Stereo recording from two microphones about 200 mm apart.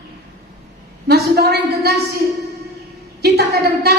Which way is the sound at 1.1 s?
50° right (ahead or behind).